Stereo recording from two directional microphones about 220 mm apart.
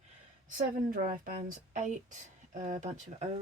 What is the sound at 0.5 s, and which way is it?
Speech, 40° right (ahead or behind).